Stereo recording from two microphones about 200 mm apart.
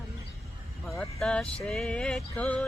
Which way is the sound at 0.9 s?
Centre (ahead or behind).